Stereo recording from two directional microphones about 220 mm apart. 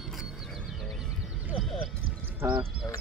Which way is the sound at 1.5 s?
5° right (ahead or behind).